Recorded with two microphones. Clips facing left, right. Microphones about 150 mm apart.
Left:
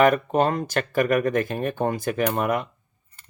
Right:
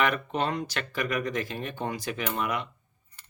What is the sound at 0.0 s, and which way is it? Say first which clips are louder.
Speech: left 8 dB; 45° left (ahead or behind).